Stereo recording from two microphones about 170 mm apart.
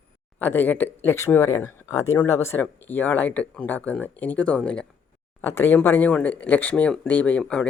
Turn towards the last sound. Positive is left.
turn(degrees=5)  # may be behind; listen again after turning